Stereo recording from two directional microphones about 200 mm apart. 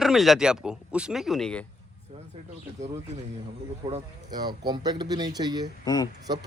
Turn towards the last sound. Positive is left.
turn(degrees=-20)  # may be behind; listen again after turning